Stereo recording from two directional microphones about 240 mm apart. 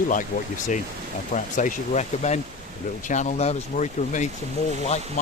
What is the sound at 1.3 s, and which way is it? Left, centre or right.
Speech, left.